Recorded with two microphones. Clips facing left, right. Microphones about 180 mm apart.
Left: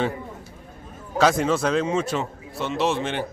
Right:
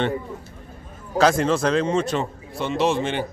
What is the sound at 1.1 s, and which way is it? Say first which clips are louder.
Speech: right 1 dB; centre (ahead or behind).